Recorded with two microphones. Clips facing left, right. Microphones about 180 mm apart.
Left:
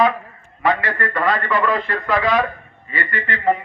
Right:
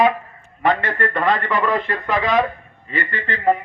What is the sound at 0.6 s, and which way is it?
A man's voice, 25° right (ahead or behind).